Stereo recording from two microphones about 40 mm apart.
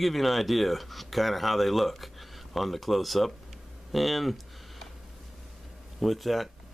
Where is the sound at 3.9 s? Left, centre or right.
Centre.